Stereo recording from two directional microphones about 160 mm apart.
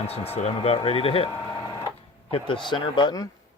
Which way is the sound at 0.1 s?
40° left (ahead or behind).